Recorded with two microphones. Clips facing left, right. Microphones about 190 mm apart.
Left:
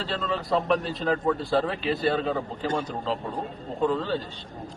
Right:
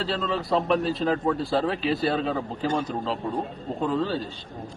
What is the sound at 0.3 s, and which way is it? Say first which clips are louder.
Speech: even; centre (ahead or behind).